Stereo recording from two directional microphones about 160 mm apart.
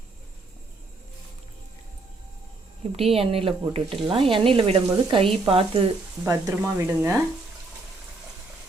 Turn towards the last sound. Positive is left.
turn(degrees=-15)  # may be behind; listen again after turning